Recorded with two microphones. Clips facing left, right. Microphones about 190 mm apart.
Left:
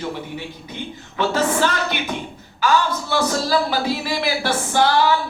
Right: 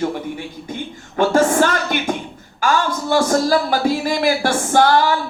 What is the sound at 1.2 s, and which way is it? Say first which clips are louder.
A man's voice: right 5 dB; 50° right (ahead or behind).